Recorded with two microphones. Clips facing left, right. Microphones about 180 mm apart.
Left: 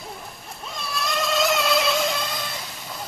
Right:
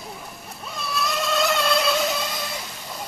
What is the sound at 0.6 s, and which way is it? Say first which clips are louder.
Vehicle: right 2 dB; centre (ahead or behind).